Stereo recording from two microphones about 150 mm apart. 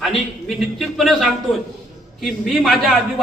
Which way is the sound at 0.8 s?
Centre (ahead or behind).